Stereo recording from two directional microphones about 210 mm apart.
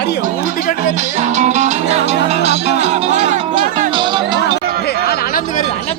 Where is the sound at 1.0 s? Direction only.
35° right (ahead or behind).